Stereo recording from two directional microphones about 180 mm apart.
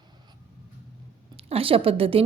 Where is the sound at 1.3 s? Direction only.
30° right (ahead or behind).